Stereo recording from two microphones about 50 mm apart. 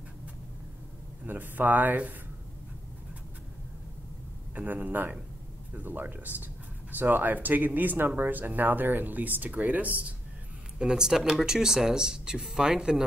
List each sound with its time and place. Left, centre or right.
1.2 s speech: right
4.6 s speech: right
10.8 s speech: centre